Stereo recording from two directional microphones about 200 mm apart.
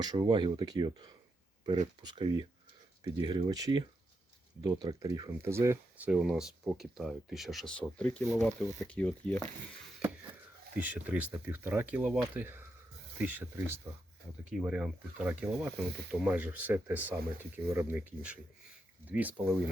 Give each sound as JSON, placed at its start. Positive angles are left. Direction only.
{"t": 0.0, "sound": "speech", "side_deg": -20}
{"t": 10.8, "sound": "speech", "side_deg": -5}